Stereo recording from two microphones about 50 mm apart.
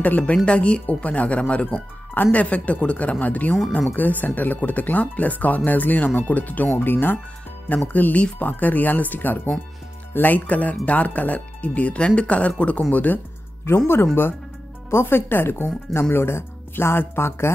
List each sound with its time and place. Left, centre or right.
0.0 s speech: left
0.5 s speech: left
14.9 s speech: left